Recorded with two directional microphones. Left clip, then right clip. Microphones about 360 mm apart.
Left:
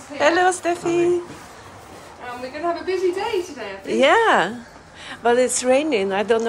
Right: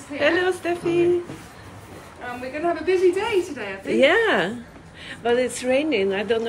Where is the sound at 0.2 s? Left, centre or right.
Centre.